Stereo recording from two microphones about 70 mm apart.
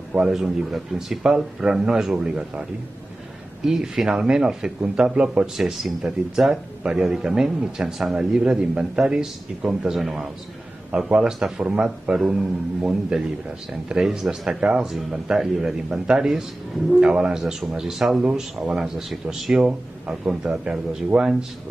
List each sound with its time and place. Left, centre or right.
0.3 s speech: centre
3.6 s speech: centre
5.6 s speech: centre